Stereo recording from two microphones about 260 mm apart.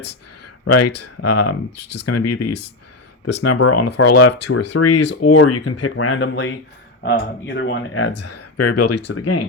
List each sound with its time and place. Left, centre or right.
0.7 s speech: left
2.5 s speech: left
3.4 s speech: left
9.0 s speech: left